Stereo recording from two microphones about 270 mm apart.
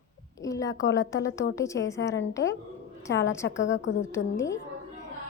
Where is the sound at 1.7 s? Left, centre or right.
Left.